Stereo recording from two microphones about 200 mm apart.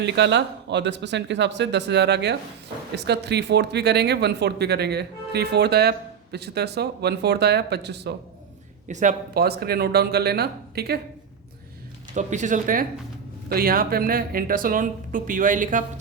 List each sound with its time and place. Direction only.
0.0 s speech: 60° right (ahead or behind)
8.9 s speech: 40° right (ahead or behind)
12.1 s speech: 40° right (ahead or behind)